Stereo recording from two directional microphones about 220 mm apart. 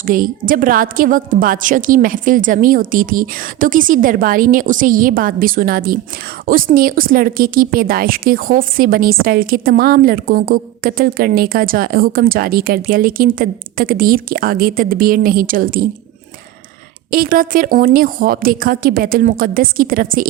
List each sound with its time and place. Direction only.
0.0 s a woman's voice: 40° right (ahead or behind)
17.1 s a woman's voice: 40° right (ahead or behind)